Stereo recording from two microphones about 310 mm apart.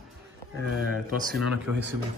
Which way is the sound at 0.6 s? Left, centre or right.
Right.